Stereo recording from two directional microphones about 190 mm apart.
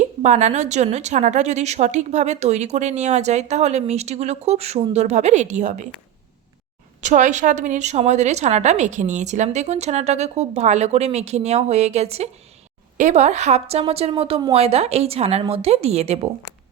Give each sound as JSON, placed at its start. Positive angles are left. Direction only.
{"t": 0.2, "sound": "a woman's voice", "side_deg": -35}
{"t": 7.0, "sound": "a woman's voice", "side_deg": -40}